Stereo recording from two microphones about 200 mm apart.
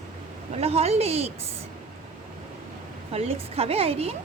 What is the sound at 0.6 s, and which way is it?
Speech, 30° right (ahead or behind).